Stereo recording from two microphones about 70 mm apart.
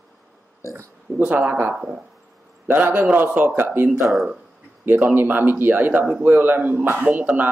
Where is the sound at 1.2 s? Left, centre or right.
Right.